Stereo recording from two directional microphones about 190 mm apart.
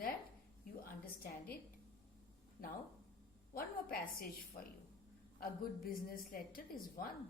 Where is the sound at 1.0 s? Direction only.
50° left (ahead or behind).